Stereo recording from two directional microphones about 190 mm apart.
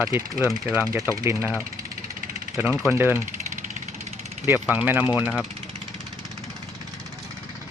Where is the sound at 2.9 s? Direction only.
10° right (ahead or behind).